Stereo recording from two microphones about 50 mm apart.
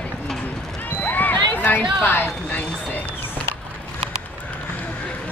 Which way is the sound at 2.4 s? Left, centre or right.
Centre.